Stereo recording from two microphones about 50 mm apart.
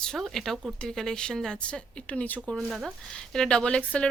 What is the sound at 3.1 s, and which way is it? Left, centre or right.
Speech, centre.